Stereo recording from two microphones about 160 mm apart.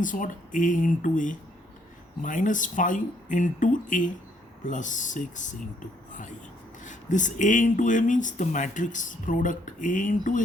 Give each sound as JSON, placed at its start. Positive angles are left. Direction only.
{"t": 0.0, "sound": "speech", "side_deg": 55}
{"t": 6.1, "sound": "a sound", "side_deg": 50}
{"t": 6.8, "sound": "speech", "side_deg": 50}